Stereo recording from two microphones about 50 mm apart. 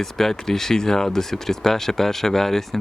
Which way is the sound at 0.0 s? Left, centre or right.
Centre.